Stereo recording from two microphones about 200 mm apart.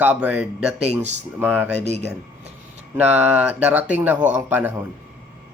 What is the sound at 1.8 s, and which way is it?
Speech, 35° right (ahead or behind).